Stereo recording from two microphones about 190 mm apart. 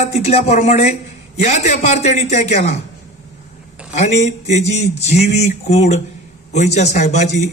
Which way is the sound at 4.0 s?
35° left (ahead or behind).